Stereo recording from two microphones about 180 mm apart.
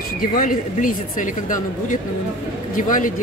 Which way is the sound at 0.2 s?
50° left (ahead or behind).